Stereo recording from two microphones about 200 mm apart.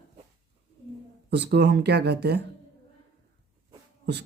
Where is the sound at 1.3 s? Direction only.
55° right (ahead or behind).